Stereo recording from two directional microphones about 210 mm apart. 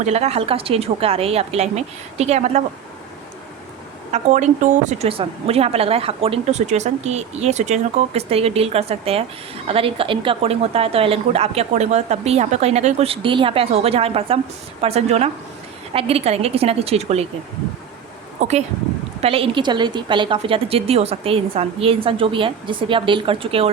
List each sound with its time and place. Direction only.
0.0 s a woman's voice: 30° right (ahead or behind)
4.1 s a woman's voice: 35° right (ahead or behind)
18.3 s a woman's voice: 30° right (ahead or behind)